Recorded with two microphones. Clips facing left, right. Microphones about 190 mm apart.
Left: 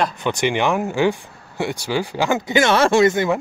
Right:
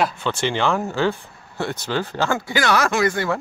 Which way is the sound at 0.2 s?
15° left (ahead or behind).